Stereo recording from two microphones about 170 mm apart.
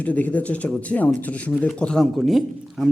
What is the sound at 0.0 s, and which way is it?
A man's voice, 10° left (ahead or behind).